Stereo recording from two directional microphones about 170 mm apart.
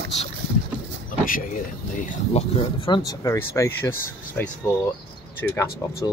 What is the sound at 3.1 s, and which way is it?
Speech, 20° left (ahead or behind).